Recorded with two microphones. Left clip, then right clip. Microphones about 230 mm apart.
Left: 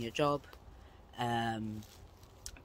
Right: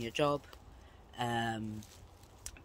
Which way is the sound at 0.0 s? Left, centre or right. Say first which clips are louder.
Even; centre.